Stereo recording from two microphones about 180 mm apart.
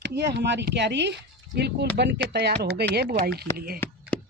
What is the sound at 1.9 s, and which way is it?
Speech, 70° right (ahead or behind).